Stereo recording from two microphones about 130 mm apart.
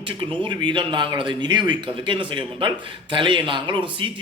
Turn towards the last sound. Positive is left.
turn(degrees=-40)  # may be behind; listen again after turning